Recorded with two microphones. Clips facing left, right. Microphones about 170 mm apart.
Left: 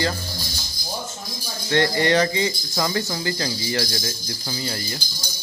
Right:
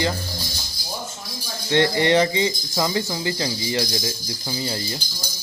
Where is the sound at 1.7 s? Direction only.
20° right (ahead or behind).